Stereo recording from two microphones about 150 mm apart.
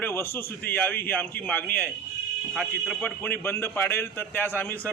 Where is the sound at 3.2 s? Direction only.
15° left (ahead or behind).